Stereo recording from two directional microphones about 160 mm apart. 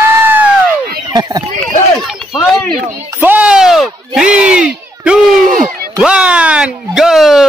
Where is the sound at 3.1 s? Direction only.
10° right (ahead or behind).